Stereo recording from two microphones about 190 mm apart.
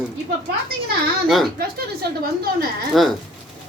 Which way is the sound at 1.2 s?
Centre (ahead or behind).